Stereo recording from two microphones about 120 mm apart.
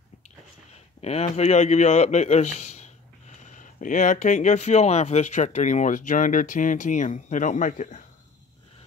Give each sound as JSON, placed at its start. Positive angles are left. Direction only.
{"t": 1.0, "sound": "a sound", "side_deg": 35}
{"t": 1.3, "sound": "a man's voice", "side_deg": 70}
{"t": 3.3, "sound": "speech", "side_deg": 85}